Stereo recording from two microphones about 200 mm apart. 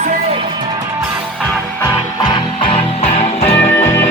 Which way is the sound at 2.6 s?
30° left (ahead or behind).